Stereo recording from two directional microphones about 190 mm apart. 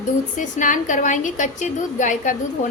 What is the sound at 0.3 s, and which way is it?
A woman's voice, 40° left (ahead or behind).